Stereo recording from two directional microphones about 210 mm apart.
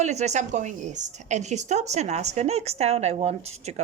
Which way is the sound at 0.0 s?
35° right (ahead or behind).